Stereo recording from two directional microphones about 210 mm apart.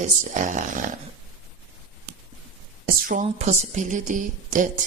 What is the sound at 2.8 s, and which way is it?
A woman's voice, 40° right (ahead or behind).